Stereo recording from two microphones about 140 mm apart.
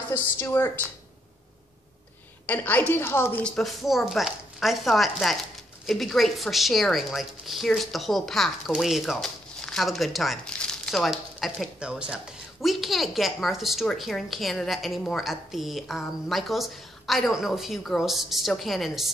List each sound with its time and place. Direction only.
0.4 s a woman's voice: 15° left (ahead or behind)
2.4 s a woman's voice: 10° left (ahead or behind)
3.4 s a woman's voice: centre (ahead or behind)